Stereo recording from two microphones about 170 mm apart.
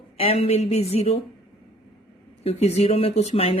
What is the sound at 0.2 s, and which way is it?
Speech, 35° left (ahead or behind).